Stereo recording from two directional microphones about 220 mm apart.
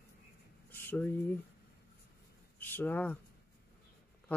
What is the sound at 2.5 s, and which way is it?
Speech, 10° left (ahead or behind).